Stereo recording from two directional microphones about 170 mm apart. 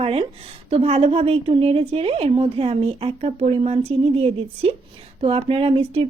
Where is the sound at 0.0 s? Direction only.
35° right (ahead or behind).